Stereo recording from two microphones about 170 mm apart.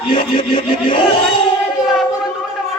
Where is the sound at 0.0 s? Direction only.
30° left (ahead or behind).